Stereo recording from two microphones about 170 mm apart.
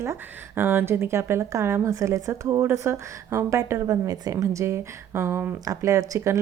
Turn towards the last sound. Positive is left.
turn(degrees=-15)  # may be behind; listen again after turning